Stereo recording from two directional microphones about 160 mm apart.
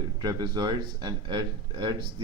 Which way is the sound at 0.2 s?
25° right (ahead or behind).